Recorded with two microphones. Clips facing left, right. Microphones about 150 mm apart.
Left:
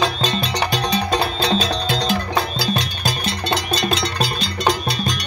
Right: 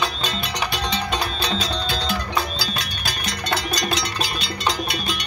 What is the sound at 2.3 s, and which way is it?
Music, 30° left (ahead or behind).